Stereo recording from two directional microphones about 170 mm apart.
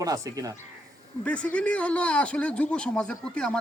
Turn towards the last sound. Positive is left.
turn(degrees=5)  # may be behind; listen again after turning